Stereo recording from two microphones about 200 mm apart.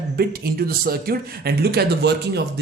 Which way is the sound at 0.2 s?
50° right (ahead or behind).